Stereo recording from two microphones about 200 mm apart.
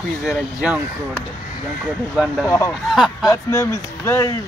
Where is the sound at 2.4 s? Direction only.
15° left (ahead or behind).